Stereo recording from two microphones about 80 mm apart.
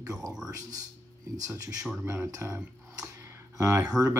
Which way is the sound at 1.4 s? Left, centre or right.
Right.